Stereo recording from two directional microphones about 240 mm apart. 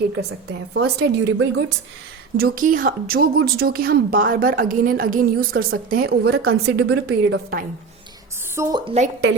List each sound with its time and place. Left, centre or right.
0.7 s a woman's voice: right
2.4 s a woman's voice: right
8.5 s a woman's voice: centre